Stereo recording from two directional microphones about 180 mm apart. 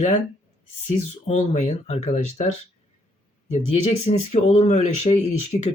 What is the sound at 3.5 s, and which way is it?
Speech, 40° left (ahead or behind).